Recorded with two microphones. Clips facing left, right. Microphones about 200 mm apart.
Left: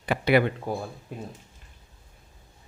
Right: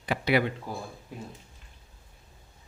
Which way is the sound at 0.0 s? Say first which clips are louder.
Left 4 dB; 55° left (ahead or behind).